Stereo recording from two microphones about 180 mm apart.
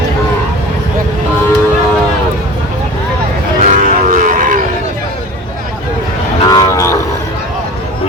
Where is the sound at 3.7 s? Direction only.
45° right (ahead or behind).